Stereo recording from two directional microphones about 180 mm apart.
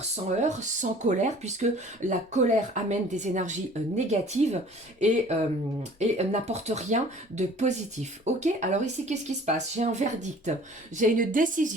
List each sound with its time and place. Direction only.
0.4 s a woman's voice: 40° right (ahead or behind)